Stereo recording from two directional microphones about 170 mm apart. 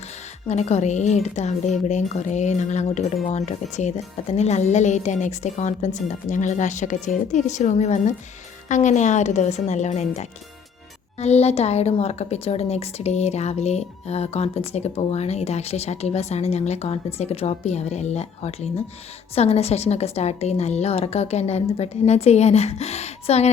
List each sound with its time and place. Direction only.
0.4 s a woman's voice: 40° left (ahead or behind)